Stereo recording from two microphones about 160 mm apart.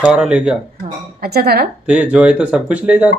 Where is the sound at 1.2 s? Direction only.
80° right.